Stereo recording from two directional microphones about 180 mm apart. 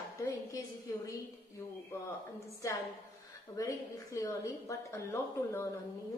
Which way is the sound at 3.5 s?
15° left (ahead or behind).